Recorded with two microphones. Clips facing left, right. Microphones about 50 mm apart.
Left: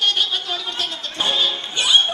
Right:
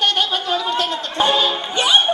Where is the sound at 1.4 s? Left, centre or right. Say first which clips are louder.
Right 3 dB; centre.